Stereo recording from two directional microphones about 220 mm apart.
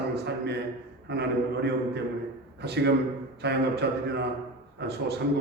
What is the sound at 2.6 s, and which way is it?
A man's voice, 50° right (ahead or behind).